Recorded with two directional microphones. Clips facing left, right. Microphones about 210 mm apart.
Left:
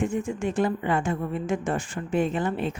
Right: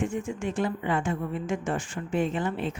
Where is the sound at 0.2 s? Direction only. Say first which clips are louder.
Left 3 dB; 40° left (ahead or behind).